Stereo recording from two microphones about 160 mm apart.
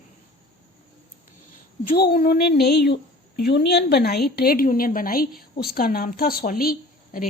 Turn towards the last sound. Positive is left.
turn(degrees=65)  # may be behind; listen again after turning